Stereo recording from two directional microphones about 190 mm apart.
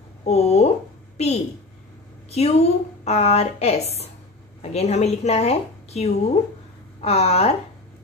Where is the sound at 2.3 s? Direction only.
35° left (ahead or behind).